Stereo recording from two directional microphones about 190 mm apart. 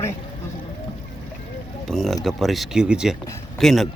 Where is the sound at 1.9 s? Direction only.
Centre (ahead or behind).